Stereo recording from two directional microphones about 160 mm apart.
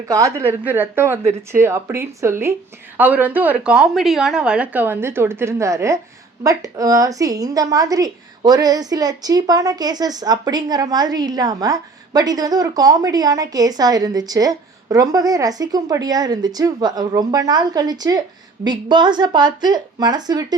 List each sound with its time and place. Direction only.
0.1 s a woman's voice: 20° right (ahead or behind)